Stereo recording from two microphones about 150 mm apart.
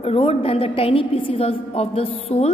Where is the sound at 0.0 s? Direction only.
40° left (ahead or behind).